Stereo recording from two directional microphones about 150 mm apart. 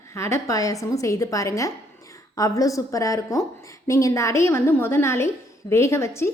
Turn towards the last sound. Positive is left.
turn(degrees=15)  # may be behind; listen again after turning